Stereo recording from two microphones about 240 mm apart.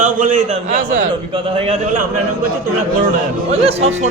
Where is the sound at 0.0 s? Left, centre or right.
Right.